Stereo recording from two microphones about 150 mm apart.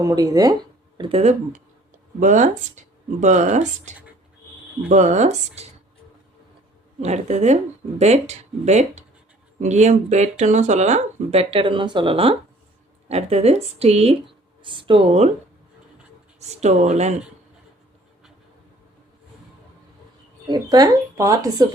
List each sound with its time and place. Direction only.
0.0 s speech: 25° right (ahead or behind)
0.9 s speech: 40° right (ahead or behind)
7.0 s speech: 50° right (ahead or behind)
16.4 s speech: 45° right (ahead or behind)
20.5 s speech: 25° right (ahead or behind)